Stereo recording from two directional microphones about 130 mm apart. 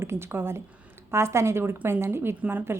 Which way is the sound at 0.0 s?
20° right (ahead or behind).